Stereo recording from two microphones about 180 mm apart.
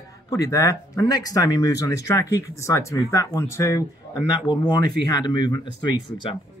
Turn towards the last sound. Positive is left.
turn(degrees=25)  # may be behind; listen again after turning